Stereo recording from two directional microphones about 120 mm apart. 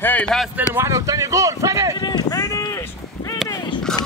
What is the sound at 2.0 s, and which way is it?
Run, 35° left (ahead or behind).